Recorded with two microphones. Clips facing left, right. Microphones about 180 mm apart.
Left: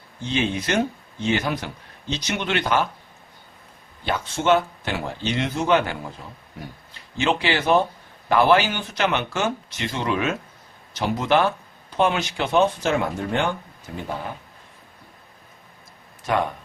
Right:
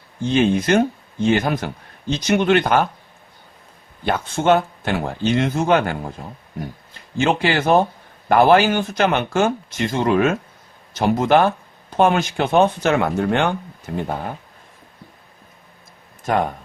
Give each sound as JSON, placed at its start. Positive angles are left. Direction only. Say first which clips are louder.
{"t": 0.3, "sound": "speech", "louder": "right 7 dB", "side_deg": -50}
{"t": 4.0, "sound": "speech", "louder": "right 4 dB", "side_deg": -50}
{"t": 7.2, "sound": "speech", "louder": "right 4 dB", "side_deg": -45}